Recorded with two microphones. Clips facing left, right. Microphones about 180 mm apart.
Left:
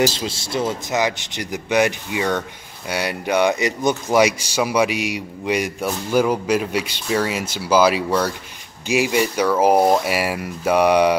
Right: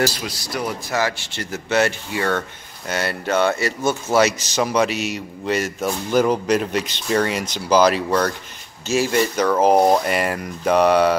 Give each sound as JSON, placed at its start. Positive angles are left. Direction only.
{"t": 0.0, "sound": "a man's voice", "side_deg": 25}